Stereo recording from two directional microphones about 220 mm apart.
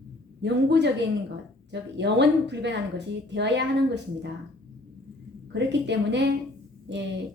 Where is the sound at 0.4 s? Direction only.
50° right (ahead or behind).